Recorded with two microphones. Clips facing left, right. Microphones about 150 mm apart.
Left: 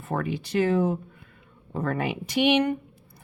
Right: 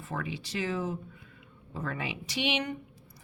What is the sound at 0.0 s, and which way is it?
Speech, 55° left (ahead or behind).